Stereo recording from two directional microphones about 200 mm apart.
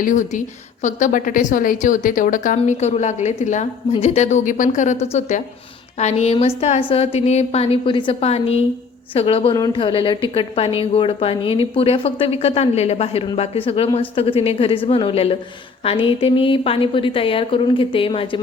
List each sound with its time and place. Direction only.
0.0 s a woman's voice: 40° left (ahead or behind)